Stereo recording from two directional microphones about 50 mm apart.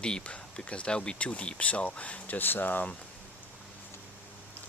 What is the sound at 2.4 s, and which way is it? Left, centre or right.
Speech, left.